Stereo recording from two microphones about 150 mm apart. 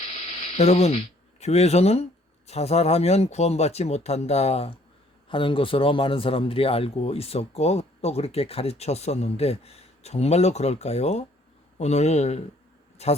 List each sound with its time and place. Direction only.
0.3 s speech: 45° left (ahead or behind)